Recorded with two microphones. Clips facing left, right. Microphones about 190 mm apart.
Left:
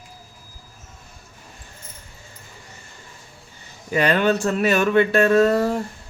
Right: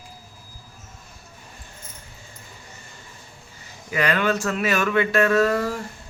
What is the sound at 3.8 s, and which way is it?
Speech, 30° left (ahead or behind).